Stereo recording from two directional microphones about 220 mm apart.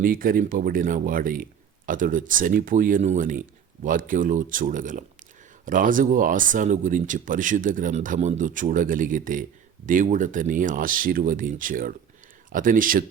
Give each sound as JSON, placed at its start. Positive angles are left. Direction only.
{"t": 0.0, "sound": "speech", "side_deg": -40}